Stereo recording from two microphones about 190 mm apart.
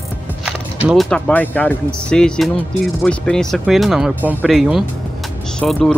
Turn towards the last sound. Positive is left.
turn(degrees=5)  # may be behind; listen again after turning